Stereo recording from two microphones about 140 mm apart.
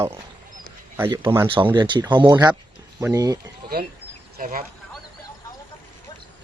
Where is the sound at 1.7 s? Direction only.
30° right (ahead or behind).